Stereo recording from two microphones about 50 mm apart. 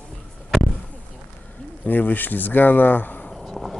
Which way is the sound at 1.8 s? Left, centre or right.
Left.